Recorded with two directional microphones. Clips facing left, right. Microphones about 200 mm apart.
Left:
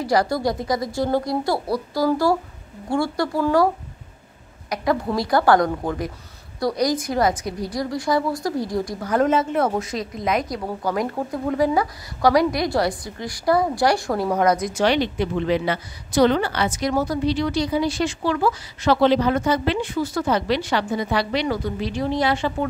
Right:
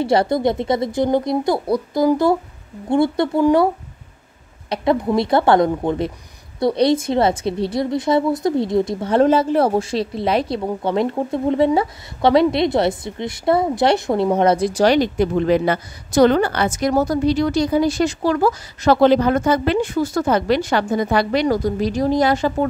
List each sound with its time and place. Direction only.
0.0 s speech: 25° right (ahead or behind)
4.6 s speech: 25° right (ahead or behind); by 22.7 s 40° right (ahead or behind)